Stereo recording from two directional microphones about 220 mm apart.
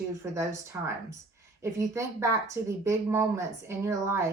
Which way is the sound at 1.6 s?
15° right (ahead or behind).